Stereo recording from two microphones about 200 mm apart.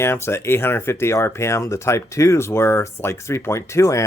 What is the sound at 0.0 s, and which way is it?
Speech, 10° left (ahead or behind).